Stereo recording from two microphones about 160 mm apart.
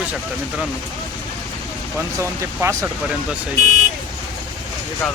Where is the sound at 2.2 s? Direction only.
20° right (ahead or behind).